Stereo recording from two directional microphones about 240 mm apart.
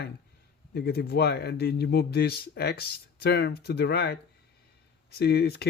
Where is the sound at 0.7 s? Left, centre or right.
Left.